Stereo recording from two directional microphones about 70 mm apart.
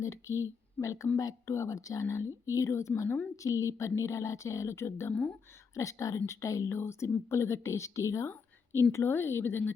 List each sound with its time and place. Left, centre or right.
0.0 s speech: left
5.7 s a woman's voice: left